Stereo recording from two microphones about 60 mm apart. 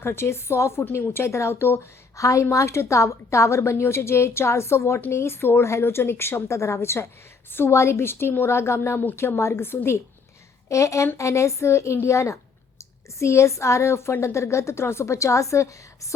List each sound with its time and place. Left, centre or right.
0.0 s a woman's voice: left
10.7 s a woman's voice: left